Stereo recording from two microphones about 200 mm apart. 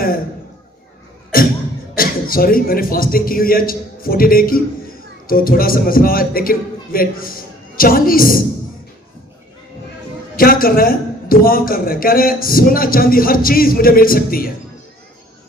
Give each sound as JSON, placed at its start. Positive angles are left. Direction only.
{"t": 1.3, "sound": "beatboxing", "side_deg": 45}
{"t": 2.0, "sound": "a man's voice", "side_deg": 45}
{"t": 10.3, "sound": "a man's voice", "side_deg": 45}